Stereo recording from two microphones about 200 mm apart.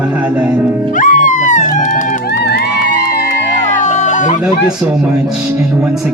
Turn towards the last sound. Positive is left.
turn(degrees=40)  # may be behind; listen again after turning